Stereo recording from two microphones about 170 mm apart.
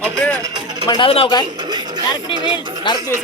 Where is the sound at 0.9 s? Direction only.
30° left (ahead or behind).